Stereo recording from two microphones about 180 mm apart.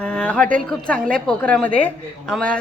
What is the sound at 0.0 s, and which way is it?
A woman's voice, 5° left (ahead or behind).